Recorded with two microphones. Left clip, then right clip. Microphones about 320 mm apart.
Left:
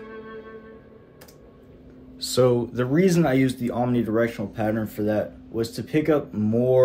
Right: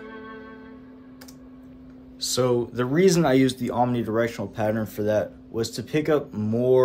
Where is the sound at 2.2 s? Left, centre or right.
Centre.